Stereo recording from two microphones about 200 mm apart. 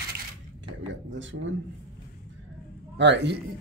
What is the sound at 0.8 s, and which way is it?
Speech, 70° right (ahead or behind).